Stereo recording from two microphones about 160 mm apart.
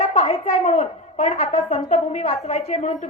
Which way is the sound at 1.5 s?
45° left (ahead or behind).